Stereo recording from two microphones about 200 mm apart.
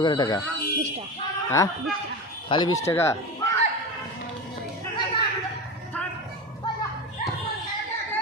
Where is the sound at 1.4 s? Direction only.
15° left (ahead or behind).